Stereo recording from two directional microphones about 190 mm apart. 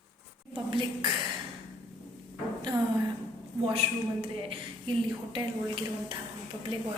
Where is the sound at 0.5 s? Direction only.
25° right (ahead or behind).